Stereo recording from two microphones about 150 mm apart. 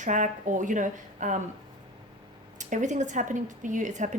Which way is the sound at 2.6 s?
55° right (ahead or behind).